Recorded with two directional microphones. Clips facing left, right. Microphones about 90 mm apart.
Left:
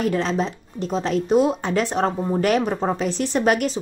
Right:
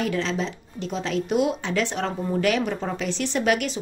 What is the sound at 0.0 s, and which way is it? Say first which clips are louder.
Speech: left 4 dB; 40° left (ahead or behind).